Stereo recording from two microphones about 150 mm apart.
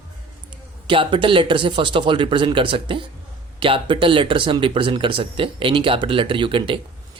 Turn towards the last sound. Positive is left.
turn(degrees=-35)  # may be behind; listen again after turning